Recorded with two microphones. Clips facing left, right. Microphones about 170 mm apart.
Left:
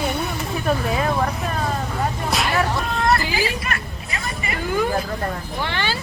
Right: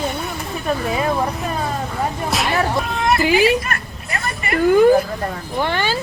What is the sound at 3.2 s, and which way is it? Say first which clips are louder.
Speech: right 9 dB; 65° right (ahead or behind).